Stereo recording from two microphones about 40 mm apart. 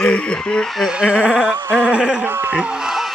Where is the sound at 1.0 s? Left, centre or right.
Right.